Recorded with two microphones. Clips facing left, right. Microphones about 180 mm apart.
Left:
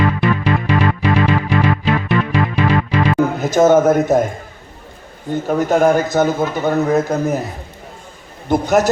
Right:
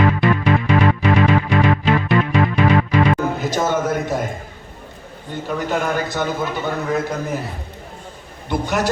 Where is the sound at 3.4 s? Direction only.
50° left (ahead or behind).